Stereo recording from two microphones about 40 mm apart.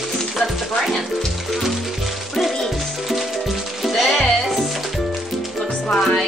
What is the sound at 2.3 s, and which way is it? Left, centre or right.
Music, centre.